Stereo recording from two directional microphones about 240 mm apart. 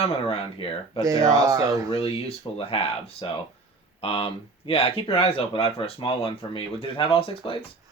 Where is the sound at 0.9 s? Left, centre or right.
Centre.